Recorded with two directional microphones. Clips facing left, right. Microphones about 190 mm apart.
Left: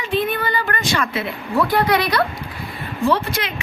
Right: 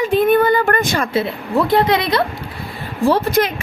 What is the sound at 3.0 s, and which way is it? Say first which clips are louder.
Speech: right 5 dB; 35° right (ahead or behind).